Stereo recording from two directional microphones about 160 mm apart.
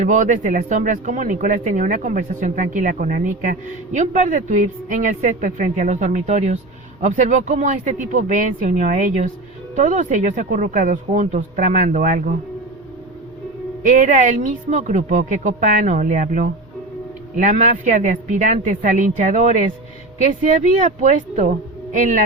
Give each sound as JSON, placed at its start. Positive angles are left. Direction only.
{"t": 0.0, "sound": "speech", "side_deg": -50}
{"t": 13.8, "sound": "speech", "side_deg": -55}